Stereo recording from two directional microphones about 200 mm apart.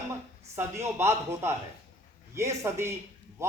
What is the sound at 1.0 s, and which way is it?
Speech, 15° right (ahead or behind).